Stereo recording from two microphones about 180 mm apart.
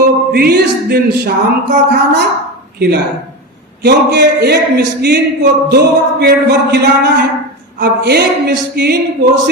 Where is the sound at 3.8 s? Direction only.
70° right (ahead or behind).